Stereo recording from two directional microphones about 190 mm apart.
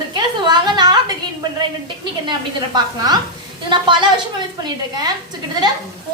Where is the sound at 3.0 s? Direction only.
20° right (ahead or behind).